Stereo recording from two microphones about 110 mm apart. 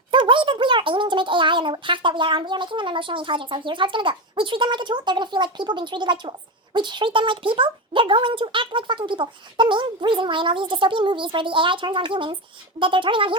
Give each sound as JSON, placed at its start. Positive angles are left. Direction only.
{"t": 0.1, "sound": "speech", "side_deg": -50}